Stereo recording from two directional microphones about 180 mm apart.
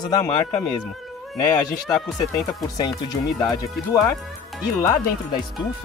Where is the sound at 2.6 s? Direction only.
20° left (ahead or behind).